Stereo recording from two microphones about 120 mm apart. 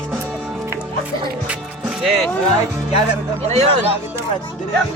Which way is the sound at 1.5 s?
5° right (ahead or behind).